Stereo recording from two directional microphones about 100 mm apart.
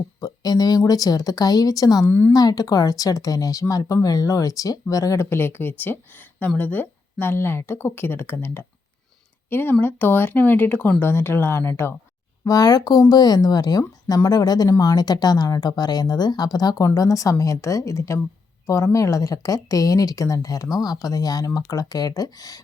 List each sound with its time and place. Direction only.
0.2 s speech: 40° left (ahead or behind)
2.0 s speech: 20° left (ahead or behind)
2.3 s speech: 40° left (ahead or behind); by 11.9 s 25° left (ahead or behind)
12.5 s speech: 40° left (ahead or behind)